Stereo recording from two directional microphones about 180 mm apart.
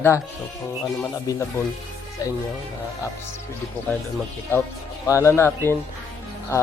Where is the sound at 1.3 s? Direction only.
20° left (ahead or behind).